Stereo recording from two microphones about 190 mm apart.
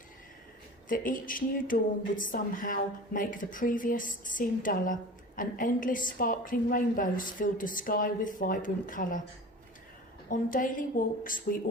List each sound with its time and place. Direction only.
0.9 s a woman's voice: 45° left (ahead or behind)
10.2 s a woman's voice: 45° left (ahead or behind)